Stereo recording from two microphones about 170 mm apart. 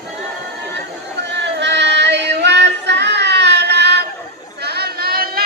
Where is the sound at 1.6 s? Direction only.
90° right.